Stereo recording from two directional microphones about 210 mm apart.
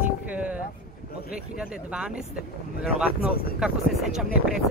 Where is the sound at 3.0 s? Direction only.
5° right (ahead or behind).